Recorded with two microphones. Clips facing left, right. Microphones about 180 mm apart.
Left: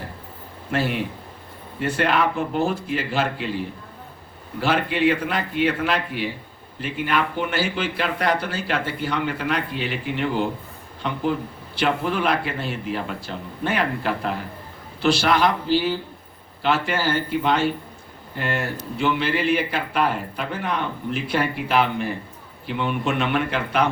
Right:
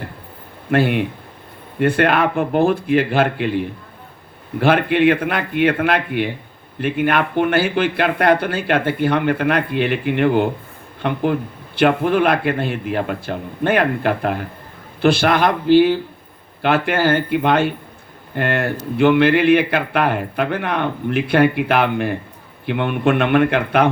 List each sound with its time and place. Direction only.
0.7 s speech: 60° right (ahead or behind)
4.6 s speech: 55° right (ahead or behind)